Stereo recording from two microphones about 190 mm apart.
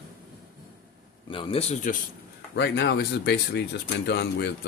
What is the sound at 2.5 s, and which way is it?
Speech, 65° left (ahead or behind).